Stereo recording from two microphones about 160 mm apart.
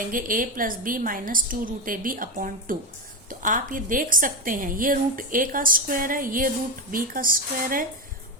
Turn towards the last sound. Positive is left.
turn(degrees=-60)  # may be behind; listen again after turning